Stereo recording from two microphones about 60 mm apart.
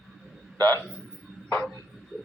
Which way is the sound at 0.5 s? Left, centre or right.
Left.